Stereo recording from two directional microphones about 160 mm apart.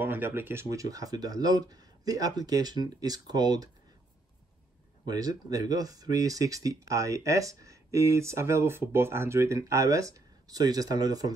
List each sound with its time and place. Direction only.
0.0 s speech: 15° right (ahead or behind)
5.0 s speech: 25° right (ahead or behind)